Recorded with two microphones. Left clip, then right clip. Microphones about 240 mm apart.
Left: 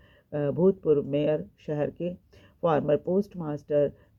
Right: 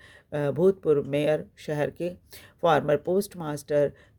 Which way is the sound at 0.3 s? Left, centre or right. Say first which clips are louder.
Right 1 dB; right.